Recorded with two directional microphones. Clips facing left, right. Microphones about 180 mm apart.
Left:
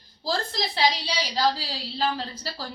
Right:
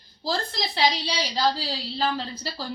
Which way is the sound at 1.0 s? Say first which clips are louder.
Even; 5° left (ahead or behind).